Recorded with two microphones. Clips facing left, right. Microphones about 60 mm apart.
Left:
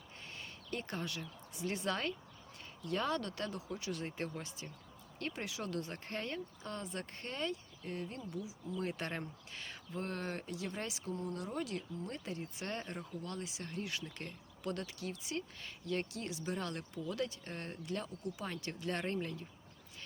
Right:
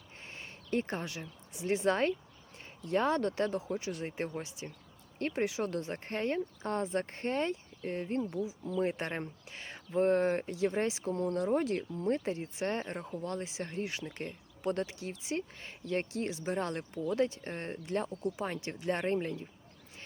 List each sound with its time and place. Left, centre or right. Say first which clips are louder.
0.3 s speech: right 7 dB; right
11.1 s speech: right 8 dB; right
11.3 s speech: right 10 dB; right